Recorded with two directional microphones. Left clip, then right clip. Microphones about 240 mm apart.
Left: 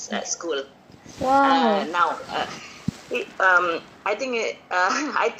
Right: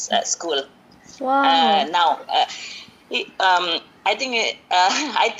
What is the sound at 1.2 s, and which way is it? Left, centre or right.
Speech, centre.